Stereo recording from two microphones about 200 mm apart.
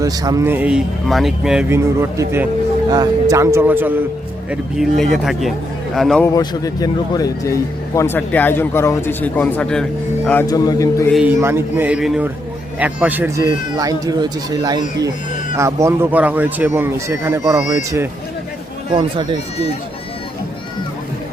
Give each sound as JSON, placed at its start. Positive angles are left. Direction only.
{"t": 0.0, "sound": "speech", "side_deg": -20}
{"t": 1.7, "sound": "speech", "side_deg": -15}
{"t": 5.1, "sound": "speech", "side_deg": 0}
{"t": 6.3, "sound": "speech", "side_deg": 20}
{"t": 11.1, "sound": "speech", "side_deg": -5}
{"t": 18.9, "sound": "speech", "side_deg": -25}